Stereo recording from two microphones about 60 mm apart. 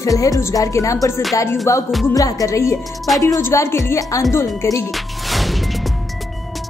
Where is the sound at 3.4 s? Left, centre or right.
Left.